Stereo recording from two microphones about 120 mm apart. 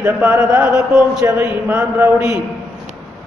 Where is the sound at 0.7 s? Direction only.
5° right (ahead or behind).